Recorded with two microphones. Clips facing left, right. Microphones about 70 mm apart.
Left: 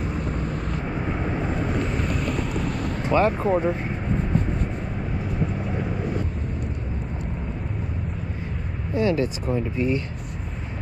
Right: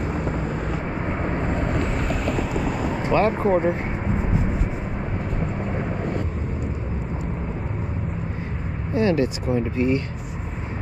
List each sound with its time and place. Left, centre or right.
0.0 s vehicle: centre
3.1 s speech: right
8.9 s speech: right